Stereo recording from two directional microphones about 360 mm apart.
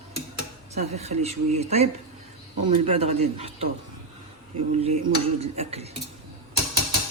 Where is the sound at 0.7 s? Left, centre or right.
Centre.